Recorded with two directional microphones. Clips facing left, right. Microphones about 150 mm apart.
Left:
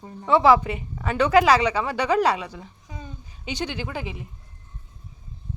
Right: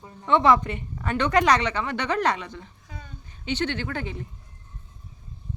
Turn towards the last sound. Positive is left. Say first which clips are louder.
# even
turn(degrees=10)  # may be behind; listen again after turning